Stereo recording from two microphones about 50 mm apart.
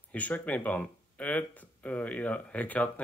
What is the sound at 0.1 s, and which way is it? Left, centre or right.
Speech, left.